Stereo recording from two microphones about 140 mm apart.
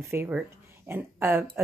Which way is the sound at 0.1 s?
10° right (ahead or behind).